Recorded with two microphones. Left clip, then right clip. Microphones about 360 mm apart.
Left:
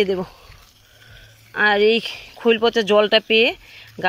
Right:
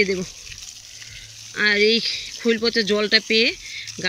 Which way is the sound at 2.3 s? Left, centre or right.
Left.